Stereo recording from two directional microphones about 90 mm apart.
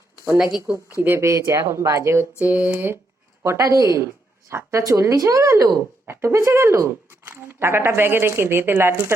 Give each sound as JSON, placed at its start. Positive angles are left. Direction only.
{"t": 1.2, "sound": "speech", "side_deg": -35}
{"t": 2.4, "sound": "a woman's voice", "side_deg": -15}